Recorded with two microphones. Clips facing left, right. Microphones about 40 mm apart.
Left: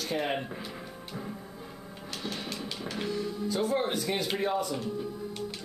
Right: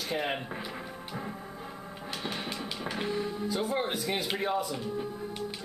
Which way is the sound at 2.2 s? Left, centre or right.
Centre.